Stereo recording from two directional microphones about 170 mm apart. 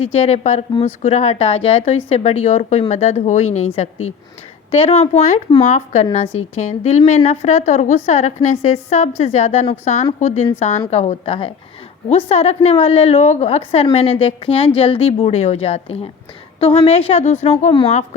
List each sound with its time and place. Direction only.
0.2 s a woman's voice: 40° left (ahead or behind)
4.7 s a woman's voice: 35° left (ahead or behind)